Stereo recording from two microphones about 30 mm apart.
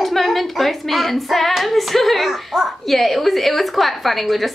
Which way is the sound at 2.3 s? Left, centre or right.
Centre.